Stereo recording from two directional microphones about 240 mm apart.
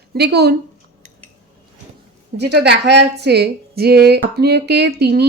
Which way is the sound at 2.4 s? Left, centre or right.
Right.